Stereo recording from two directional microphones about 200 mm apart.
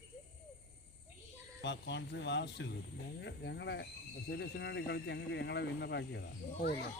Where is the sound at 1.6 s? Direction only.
60° left (ahead or behind).